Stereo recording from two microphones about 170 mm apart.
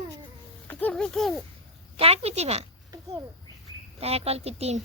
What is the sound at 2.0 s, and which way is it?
Speech, 35° right (ahead or behind).